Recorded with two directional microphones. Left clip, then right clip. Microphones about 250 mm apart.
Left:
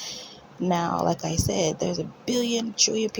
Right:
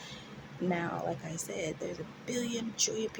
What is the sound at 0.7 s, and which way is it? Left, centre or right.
Speech, left.